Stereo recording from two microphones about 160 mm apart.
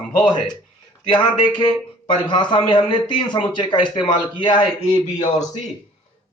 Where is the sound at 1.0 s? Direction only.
30° left (ahead or behind).